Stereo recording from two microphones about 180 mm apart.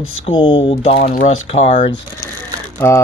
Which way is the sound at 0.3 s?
30° left (ahead or behind).